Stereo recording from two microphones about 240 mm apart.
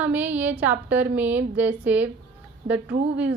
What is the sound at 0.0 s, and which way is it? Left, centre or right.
A woman's voice, centre.